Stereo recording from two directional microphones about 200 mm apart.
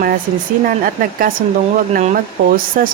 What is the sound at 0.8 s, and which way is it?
Speech, 45° right (ahead or behind).